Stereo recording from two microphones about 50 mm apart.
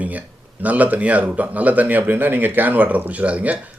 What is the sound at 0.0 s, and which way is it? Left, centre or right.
Speech, right.